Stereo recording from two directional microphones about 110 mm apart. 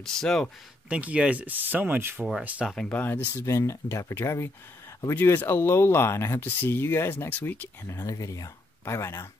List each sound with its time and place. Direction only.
0.0 s speech: 5° left (ahead or behind)
0.8 s speech: 10° right (ahead or behind)
2.7 s speech: 10° left (ahead or behind)
3.3 s speech: 30° left (ahead or behind)
7.8 s speech: 30° left (ahead or behind)